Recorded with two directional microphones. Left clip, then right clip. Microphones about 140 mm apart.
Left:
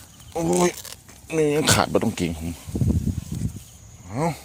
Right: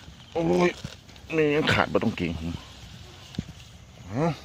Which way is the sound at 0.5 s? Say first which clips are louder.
Left 2 dB; 30° left (ahead or behind).